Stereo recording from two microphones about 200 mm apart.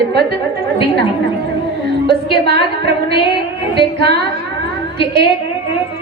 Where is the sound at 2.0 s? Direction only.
55° right (ahead or behind).